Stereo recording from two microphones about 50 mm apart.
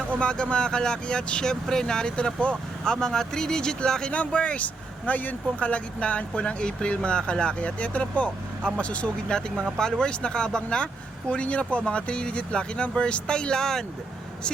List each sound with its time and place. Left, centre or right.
0.2 s speech: centre